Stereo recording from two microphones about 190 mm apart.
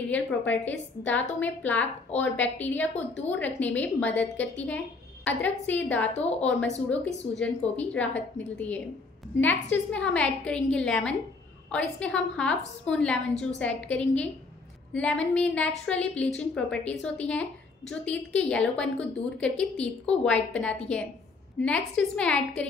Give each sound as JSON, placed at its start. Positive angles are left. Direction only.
{"t": 0.0, "sound": "a woman's voice", "side_deg": 10}